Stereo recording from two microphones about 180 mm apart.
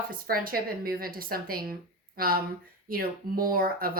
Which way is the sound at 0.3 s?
55° right (ahead or behind).